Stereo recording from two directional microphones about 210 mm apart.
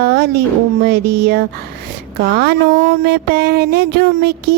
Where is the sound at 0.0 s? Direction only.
50° right (ahead or behind).